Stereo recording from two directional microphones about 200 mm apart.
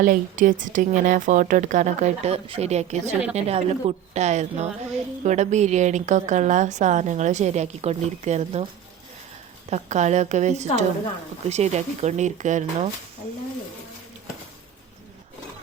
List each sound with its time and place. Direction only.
0.0 s a woman's voice: 40° right (ahead or behind)
3.0 s a woman's voice: 5° right (ahead or behind)
3.3 s a woman's voice: 30° right (ahead or behind)
9.6 s a woman's voice: 35° right (ahead or behind)